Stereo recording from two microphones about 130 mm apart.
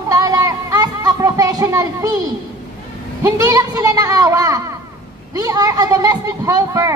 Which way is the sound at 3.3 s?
25° right (ahead or behind).